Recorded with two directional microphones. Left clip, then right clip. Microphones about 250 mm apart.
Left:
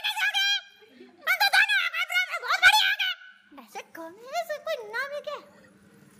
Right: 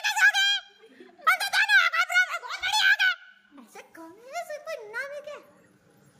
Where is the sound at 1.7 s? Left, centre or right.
Right.